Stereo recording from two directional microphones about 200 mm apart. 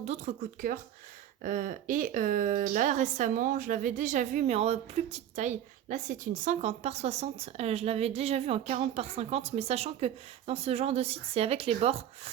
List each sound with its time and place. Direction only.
0.0 s a woman's voice: 35° right (ahead or behind)